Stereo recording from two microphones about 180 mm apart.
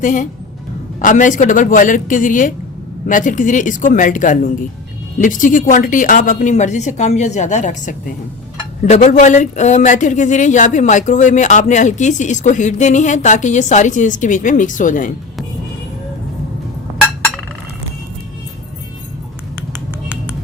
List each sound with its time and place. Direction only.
0.0 s speech: 45° left (ahead or behind)
17.0 s chink: centre (ahead or behind)